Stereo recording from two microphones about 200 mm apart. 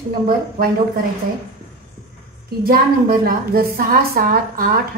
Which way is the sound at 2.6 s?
50° right (ahead or behind).